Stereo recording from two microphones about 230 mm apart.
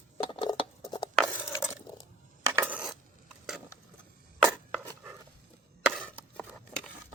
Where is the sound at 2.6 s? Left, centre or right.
Centre.